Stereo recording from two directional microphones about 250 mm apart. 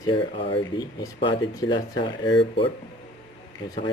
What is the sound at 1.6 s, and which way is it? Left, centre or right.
Speech, centre.